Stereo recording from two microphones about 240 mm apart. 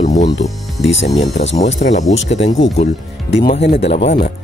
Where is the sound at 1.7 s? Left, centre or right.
Left.